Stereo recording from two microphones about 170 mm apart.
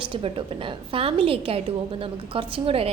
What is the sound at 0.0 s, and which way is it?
A woman's voice, 30° right (ahead or behind).